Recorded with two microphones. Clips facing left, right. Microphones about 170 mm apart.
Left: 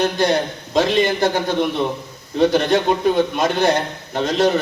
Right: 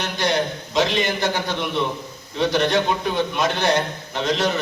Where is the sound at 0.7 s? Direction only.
50° left (ahead or behind).